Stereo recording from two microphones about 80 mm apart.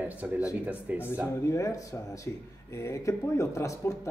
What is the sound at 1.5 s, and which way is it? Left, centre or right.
Speech, left.